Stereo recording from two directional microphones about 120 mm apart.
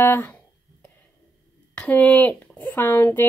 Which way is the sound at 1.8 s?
15° left (ahead or behind).